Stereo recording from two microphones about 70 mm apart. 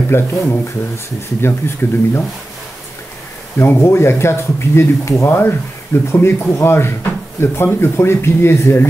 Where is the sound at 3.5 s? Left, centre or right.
Left.